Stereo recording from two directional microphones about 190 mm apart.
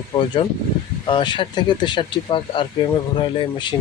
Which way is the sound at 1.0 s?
25° left (ahead or behind).